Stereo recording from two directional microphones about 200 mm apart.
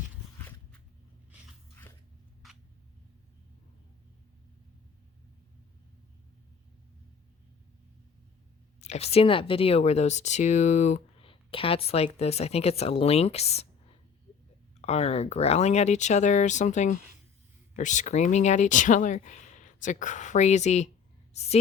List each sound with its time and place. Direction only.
8.8 s speech: 30° left (ahead or behind)